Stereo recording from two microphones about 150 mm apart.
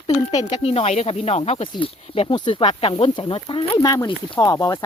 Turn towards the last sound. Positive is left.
turn(degrees=25)  # may be behind; listen again after turning